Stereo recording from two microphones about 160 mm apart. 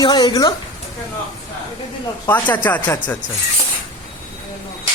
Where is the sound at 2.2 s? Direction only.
10° left (ahead or behind).